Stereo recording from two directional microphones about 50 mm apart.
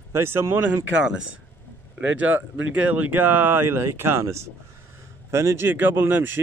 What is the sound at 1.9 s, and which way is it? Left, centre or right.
Speech, right.